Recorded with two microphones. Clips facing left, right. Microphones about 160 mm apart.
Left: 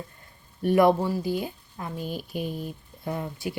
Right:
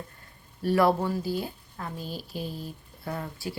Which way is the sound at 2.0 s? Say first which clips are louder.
Left 6 dB; 50° left (ahead or behind).